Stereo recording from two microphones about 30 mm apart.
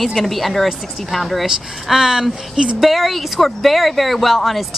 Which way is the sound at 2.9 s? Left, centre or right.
Centre.